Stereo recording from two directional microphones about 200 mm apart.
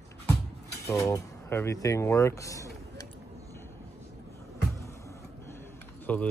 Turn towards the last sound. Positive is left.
turn(degrees=5)  # may be behind; listen again after turning